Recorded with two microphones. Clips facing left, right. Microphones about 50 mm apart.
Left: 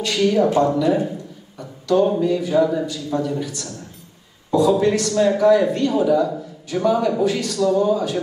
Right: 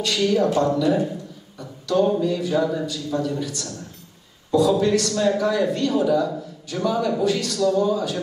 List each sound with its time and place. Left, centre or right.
0.0 s a woman's voice: left
1.6 s a sound: centre
2.1 s a woman's voice: centre